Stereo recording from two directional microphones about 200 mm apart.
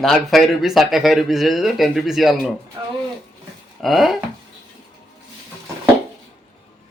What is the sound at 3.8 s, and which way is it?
Speech, centre (ahead or behind).